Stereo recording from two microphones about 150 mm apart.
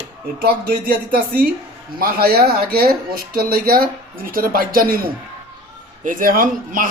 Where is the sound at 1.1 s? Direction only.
85° right.